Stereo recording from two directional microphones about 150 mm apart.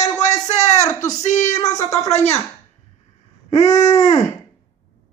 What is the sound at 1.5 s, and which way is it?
Speech, 25° left (ahead or behind).